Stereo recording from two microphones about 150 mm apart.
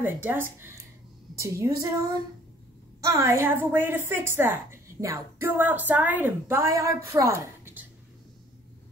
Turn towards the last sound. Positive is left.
turn(degrees=-15)  # may be behind; listen again after turning